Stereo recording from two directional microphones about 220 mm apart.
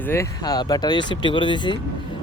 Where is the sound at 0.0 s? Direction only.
10° left (ahead or behind).